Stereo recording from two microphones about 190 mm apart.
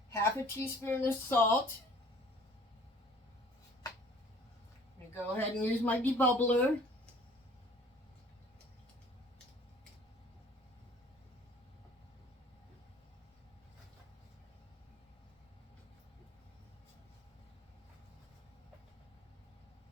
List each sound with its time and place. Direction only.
0.1 s speech: 15° left (ahead or behind)
5.1 s speech: 10° left (ahead or behind)